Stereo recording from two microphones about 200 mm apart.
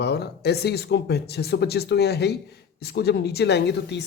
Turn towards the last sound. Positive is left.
turn(degrees=60)  # may be behind; listen again after turning